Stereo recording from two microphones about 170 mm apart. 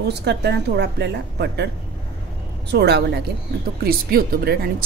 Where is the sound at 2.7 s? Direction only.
75° right (ahead or behind).